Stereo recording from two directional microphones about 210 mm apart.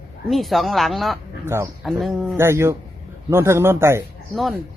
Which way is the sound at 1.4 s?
15° right (ahead or behind).